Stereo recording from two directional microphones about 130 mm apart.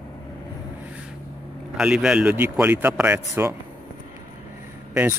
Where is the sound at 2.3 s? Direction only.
15° right (ahead or behind).